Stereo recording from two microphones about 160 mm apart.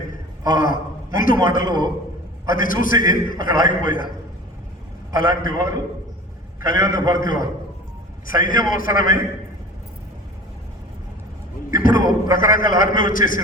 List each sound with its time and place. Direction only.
0.1 s a man's voice: 55° left (ahead or behind)
5.1 s a man's voice: 60° left (ahead or behind)
11.7 s a man's voice: 60° left (ahead or behind)